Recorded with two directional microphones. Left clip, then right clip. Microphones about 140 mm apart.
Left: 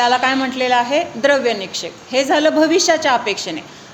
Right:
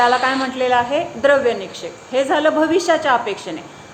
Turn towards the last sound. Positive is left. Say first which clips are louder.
# left 1 dB
turn(degrees=40)  # may be behind; listen again after turning